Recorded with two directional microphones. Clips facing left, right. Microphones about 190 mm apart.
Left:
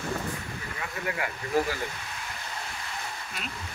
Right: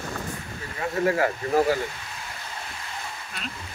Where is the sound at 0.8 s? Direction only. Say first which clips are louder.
Right 11 dB; 35° right (ahead or behind).